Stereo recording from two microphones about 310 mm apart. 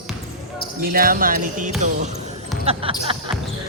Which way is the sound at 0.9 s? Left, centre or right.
Right.